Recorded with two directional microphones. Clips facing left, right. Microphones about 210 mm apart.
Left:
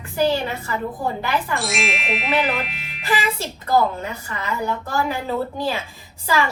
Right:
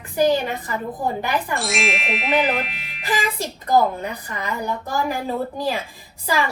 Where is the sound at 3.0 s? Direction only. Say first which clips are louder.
Left 1 dB; 15° right (ahead or behind).